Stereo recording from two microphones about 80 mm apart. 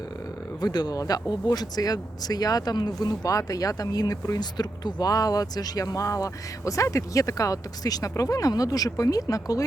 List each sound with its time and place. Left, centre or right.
0.6 s speech: left